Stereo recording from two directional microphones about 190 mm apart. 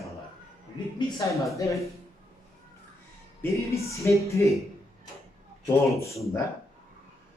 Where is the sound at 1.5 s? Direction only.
15° left (ahead or behind).